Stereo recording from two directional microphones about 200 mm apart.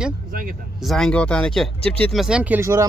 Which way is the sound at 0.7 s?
Centre (ahead or behind).